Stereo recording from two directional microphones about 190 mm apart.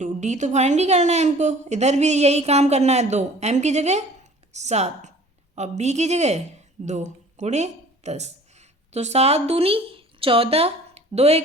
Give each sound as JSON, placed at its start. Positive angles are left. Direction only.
{"t": 0.0, "sound": "a woman's voice", "side_deg": -40}